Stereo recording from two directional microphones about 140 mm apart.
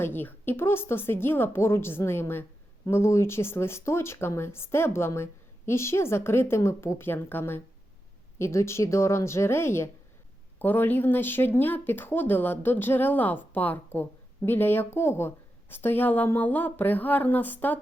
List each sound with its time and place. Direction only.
0.0 s a woman's voice: 15° left (ahead or behind)